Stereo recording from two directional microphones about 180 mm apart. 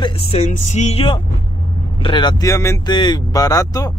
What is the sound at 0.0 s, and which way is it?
Speech, 35° left (ahead or behind).